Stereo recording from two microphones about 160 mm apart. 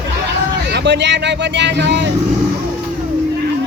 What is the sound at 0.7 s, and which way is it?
Speech, 90° right.